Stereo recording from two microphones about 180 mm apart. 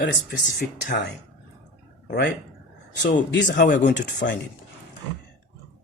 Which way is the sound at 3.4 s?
45° left (ahead or behind).